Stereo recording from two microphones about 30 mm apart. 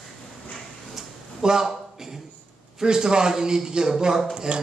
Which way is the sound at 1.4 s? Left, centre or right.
Centre.